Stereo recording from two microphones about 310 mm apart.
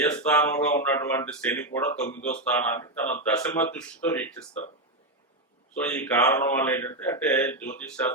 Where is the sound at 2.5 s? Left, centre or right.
Centre.